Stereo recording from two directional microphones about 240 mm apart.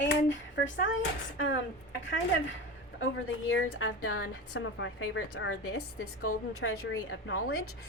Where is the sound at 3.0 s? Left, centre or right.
Left.